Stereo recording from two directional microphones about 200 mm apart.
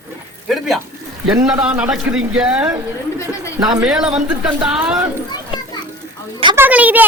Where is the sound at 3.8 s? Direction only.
5° right (ahead or behind).